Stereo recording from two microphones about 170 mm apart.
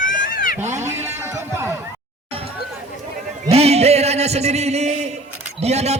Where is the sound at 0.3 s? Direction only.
60° left (ahead or behind).